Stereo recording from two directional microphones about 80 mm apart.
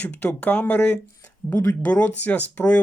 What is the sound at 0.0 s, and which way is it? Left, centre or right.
Speech, centre.